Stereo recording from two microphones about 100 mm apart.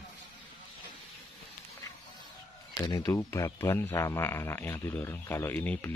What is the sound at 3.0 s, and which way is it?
Speech, 30° left (ahead or behind).